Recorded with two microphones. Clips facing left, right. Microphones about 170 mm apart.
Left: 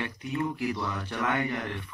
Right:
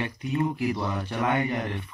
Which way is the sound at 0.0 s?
20° right (ahead or behind).